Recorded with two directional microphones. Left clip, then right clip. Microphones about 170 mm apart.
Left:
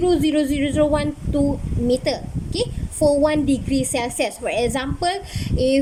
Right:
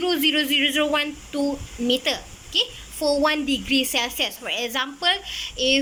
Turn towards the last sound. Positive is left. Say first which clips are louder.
# left 2 dB
turn(degrees=25)  # may be behind; listen again after turning